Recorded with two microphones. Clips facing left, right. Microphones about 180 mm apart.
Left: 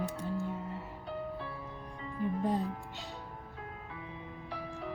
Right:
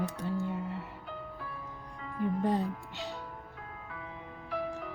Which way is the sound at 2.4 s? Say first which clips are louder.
Right 2 dB; 75° right (ahead or behind).